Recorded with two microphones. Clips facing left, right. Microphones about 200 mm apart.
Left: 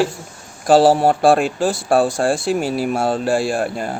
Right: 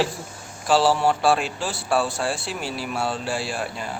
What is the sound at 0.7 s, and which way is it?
Speech, 50° left (ahead or behind).